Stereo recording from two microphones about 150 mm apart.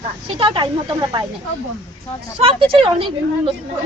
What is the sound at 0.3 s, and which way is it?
Speech, 35° right (ahead or behind).